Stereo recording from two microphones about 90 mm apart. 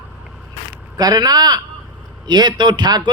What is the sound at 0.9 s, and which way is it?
Speech, 45° right (ahead or behind).